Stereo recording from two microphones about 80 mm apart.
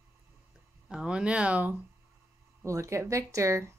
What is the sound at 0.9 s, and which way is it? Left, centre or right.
Speech, centre.